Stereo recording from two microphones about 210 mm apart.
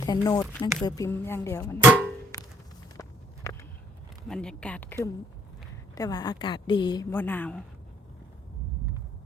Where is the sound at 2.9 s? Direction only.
15° left (ahead or behind).